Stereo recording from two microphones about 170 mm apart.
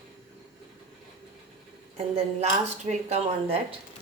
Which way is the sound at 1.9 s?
35° right (ahead or behind).